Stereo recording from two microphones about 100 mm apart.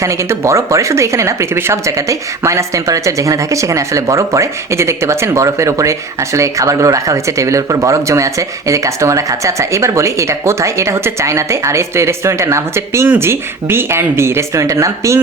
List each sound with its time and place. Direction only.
0.0 s speech: 30° right (ahead or behind)